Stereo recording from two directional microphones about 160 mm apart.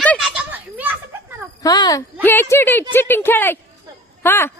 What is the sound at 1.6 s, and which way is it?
Speech, 25° left (ahead or behind).